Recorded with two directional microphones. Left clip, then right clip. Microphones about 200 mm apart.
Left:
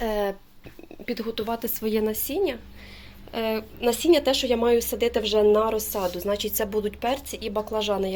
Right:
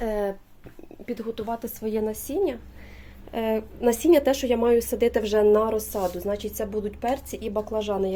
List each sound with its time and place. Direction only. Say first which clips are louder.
0.0 s a sound: left 1 dB; 10° right (ahead or behind)
1.0 s a woman's voice: left 2 dB; 5° left (ahead or behind)
3.3 s a woman's voice: right 1 dB; 20° right (ahead or behind)
4.5 s a woman's voice: even; 15° right (ahead or behind)
5.5 s a woman's voice: even; 20° right (ahead or behind); by 7.2 s centre (ahead or behind)
7.3 s a woman's voice: even; 20° right (ahead or behind)